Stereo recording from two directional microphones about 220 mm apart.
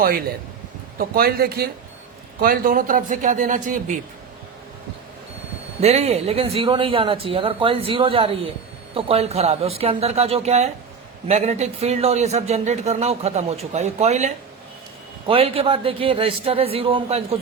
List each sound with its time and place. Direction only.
0.9 s a man's voice: 40° right (ahead or behind)
5.8 s a man's voice: 30° right (ahead or behind)